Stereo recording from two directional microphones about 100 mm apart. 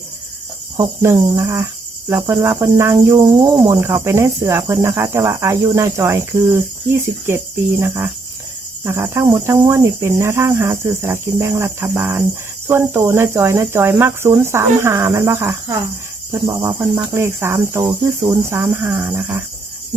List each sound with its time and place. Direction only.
1.0 s speech: 25° right (ahead or behind)
3.1 s speech: 40° right (ahead or behind)